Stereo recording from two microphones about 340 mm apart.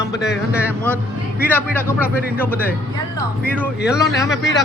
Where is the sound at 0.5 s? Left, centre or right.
Centre.